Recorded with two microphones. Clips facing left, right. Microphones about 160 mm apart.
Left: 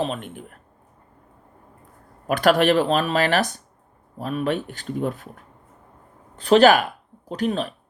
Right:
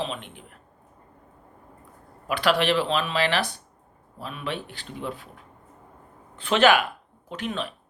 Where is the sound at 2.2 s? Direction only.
45° left (ahead or behind).